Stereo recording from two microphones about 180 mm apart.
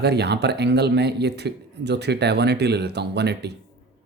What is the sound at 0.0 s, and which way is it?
Speech, 65° right (ahead or behind).